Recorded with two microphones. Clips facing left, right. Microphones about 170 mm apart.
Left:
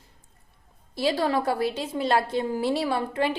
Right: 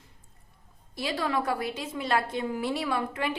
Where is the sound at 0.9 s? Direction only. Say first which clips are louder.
Left 5 dB; 35° left (ahead or behind).